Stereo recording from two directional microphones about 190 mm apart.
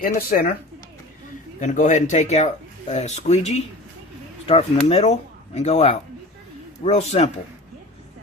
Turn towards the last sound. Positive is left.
turn(degrees=35)  # may be behind; listen again after turning